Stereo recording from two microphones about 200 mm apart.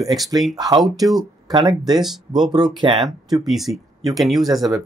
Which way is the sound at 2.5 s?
20° right (ahead or behind).